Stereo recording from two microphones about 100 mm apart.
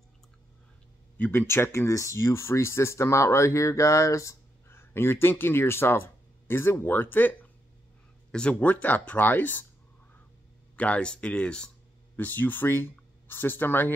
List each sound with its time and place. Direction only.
1.1 s speech: 20° left (ahead or behind)
10.8 s speech: 10° left (ahead or behind)